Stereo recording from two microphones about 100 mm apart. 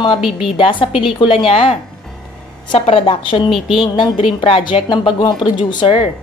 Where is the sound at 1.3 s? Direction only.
70° left (ahead or behind).